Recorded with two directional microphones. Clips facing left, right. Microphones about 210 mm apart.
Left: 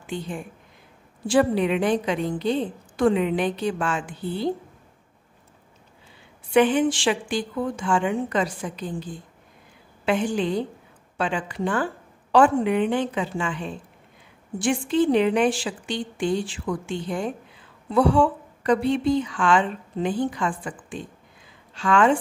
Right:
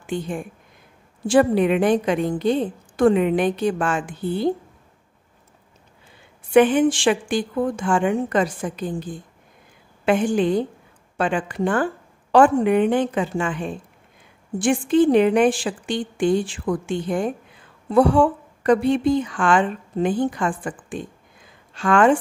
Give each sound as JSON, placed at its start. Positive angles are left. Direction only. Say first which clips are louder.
{"t": 0.0, "sound": "a woman's voice", "louder": "right 4 dB", "side_deg": -50}
{"t": 6.5, "sound": "a woman's voice", "louder": "right 4 dB", "side_deg": -50}